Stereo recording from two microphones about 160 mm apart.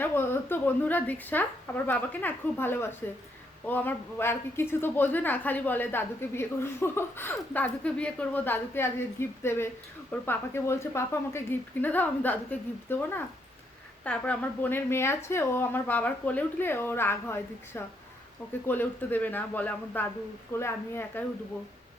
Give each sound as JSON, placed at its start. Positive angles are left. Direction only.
{"t": 0.0, "sound": "a woman's voice", "side_deg": 15}